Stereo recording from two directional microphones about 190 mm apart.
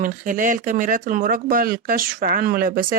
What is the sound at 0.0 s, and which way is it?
Speech, 45° right (ahead or behind).